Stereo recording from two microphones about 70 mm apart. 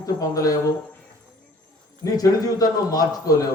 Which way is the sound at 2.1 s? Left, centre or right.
Left.